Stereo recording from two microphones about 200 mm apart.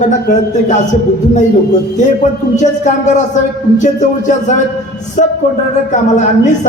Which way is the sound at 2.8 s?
35° left (ahead or behind).